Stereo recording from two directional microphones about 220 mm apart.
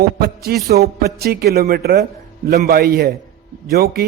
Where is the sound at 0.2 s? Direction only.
45° right (ahead or behind).